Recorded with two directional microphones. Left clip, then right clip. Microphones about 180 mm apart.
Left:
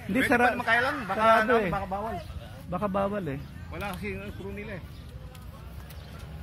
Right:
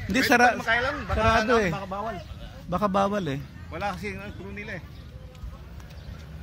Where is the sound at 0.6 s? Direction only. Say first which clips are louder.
Even; 45° left (ahead or behind).